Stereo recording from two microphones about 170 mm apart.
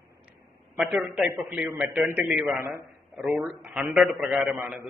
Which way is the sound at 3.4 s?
5° right (ahead or behind).